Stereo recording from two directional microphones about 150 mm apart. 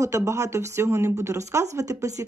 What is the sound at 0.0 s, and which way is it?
Speech, 20° right (ahead or behind).